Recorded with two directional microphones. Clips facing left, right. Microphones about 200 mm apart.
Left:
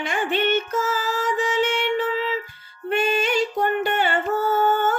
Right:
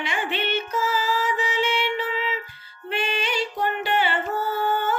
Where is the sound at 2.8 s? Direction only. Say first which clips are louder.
Left 6 dB; 45° left (ahead or behind).